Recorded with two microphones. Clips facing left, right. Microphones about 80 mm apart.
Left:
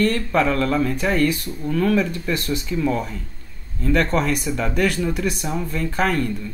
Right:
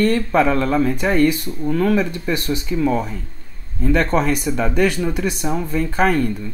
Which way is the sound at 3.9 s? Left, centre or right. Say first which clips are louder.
Right 1 dB; centre.